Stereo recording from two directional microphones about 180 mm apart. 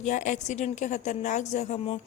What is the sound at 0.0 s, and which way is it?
A woman's voice, 45° left (ahead or behind).